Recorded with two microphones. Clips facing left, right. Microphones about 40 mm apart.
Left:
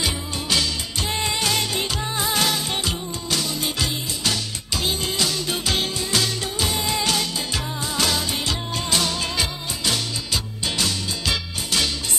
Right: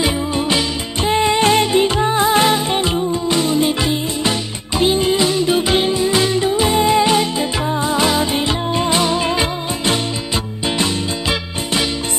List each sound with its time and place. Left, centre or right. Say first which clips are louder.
0.0 s music: right 9 dB; right